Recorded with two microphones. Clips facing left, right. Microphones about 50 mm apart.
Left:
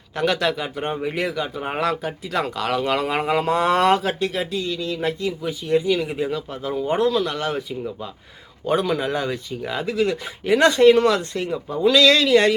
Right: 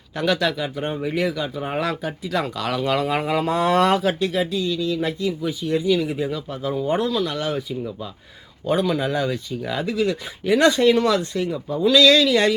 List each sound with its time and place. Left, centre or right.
0.2 s speech: left
8.6 s speech: left